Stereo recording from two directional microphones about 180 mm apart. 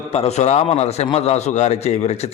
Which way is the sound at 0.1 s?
35° left (ahead or behind).